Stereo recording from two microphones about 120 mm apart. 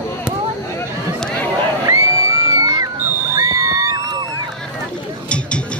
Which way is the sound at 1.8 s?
30° right (ahead or behind).